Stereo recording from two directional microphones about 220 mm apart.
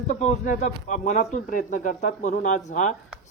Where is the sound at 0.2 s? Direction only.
35° left (ahead or behind).